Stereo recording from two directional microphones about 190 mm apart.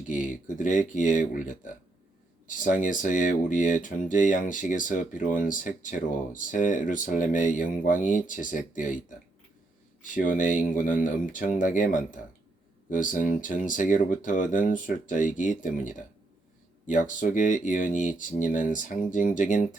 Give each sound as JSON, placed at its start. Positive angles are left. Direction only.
{"t": 0.1, "sound": "speech", "side_deg": 45}
{"t": 10.0, "sound": "speech", "side_deg": 45}